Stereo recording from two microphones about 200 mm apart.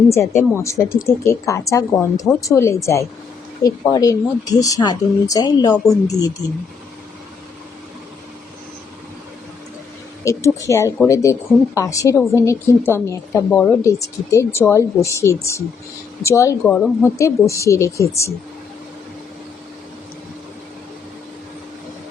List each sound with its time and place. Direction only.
0.1 s speech: 15° left (ahead or behind)
10.2 s speech: 15° left (ahead or behind)